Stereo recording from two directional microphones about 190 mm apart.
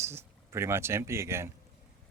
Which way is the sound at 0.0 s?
15° right (ahead or behind).